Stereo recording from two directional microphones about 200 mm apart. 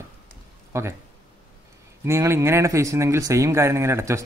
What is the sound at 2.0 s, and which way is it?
Speech, 15° right (ahead or behind).